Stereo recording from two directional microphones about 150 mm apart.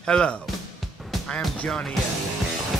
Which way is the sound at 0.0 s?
5° left (ahead or behind).